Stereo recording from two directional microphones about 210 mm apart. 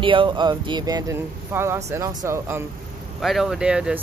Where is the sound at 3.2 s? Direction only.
Centre (ahead or behind).